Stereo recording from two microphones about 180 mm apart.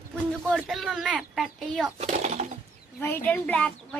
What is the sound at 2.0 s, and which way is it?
Speech, 35° right (ahead or behind).